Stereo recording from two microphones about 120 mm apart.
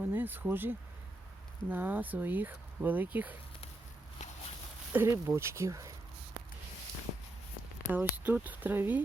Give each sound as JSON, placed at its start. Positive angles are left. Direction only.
{"t": 0.0, "sound": "speech", "side_deg": -15}
{"t": 4.9, "sound": "speech", "side_deg": -20}
{"t": 7.9, "sound": "speech", "side_deg": -15}